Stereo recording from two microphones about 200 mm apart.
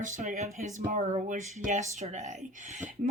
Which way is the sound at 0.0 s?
40° right (ahead or behind).